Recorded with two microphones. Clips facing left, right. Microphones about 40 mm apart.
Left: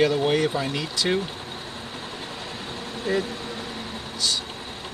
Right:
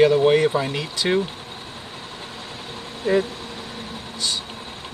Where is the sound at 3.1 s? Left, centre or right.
Centre.